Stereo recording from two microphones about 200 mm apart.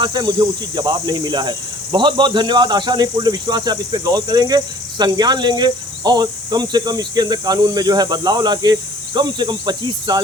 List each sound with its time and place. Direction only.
0.0 s speech: 20° right (ahead or behind)